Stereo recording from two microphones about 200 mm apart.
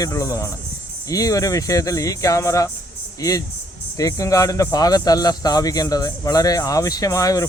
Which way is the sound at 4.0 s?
15° left (ahead or behind).